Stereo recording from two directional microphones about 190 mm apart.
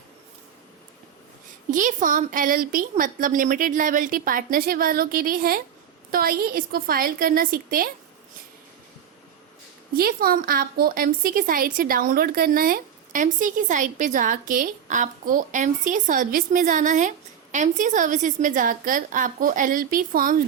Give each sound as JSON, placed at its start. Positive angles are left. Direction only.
{"t": 1.7, "sound": "a woman's voice", "side_deg": -45}
{"t": 9.9, "sound": "a woman's voice", "side_deg": -50}